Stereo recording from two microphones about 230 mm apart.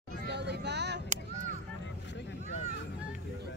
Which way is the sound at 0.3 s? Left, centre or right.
Right.